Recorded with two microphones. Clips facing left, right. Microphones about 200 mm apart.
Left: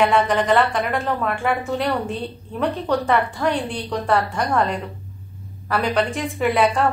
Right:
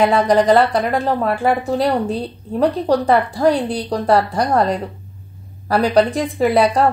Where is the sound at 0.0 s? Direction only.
35° right (ahead or behind).